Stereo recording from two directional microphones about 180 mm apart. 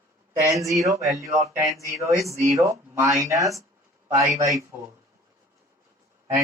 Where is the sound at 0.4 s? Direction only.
20° right (ahead or behind).